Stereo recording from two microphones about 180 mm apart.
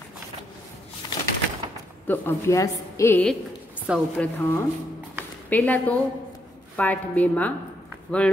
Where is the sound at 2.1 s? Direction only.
15° left (ahead or behind).